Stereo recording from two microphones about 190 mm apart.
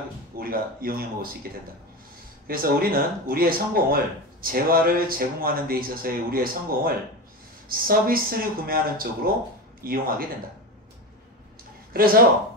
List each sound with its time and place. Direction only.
0.4 s speech: 50° right (ahead or behind)
2.4 s speech: 50° right (ahead or behind)
11.9 s speech: 50° right (ahead or behind)